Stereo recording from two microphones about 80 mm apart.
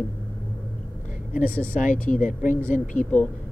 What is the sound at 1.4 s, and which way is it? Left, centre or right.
Speech, centre.